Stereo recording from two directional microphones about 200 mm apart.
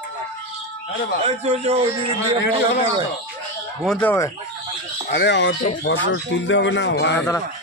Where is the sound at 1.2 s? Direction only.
30° right (ahead or behind).